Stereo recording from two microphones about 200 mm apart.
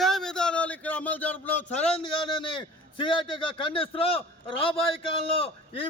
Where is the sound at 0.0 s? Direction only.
Centre (ahead or behind).